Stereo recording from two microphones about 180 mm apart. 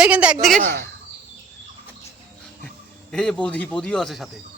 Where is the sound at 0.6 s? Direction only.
55° right (ahead or behind).